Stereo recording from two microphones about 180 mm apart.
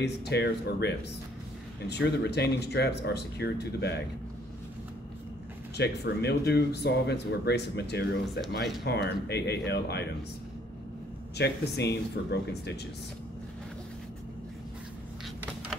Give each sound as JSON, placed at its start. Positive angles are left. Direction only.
{"t": 0.0, "sound": "speech", "side_deg": 65}
{"t": 5.8, "sound": "speech", "side_deg": 65}
{"t": 11.3, "sound": "speech", "side_deg": 65}